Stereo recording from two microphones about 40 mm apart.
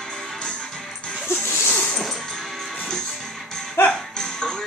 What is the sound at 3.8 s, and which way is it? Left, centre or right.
Music, left.